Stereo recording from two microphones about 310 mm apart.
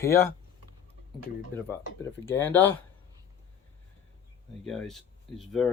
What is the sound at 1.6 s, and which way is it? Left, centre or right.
Speech, centre.